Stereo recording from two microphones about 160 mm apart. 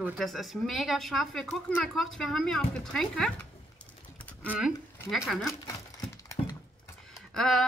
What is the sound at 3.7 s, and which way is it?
Typing, 10° left (ahead or behind).